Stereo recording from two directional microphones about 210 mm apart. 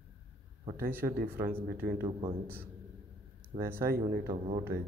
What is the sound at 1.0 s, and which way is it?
Speech, 45° right (ahead or behind).